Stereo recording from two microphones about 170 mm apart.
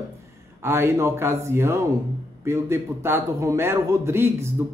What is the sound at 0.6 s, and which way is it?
Speech, 15° right (ahead or behind).